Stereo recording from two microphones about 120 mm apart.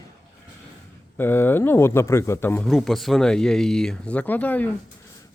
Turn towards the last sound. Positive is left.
turn(degrees=15)  # may be behind; listen again after turning